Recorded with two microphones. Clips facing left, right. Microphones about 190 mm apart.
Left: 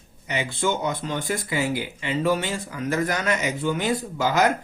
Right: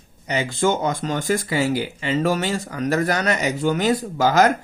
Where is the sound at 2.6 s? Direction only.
70° right (ahead or behind).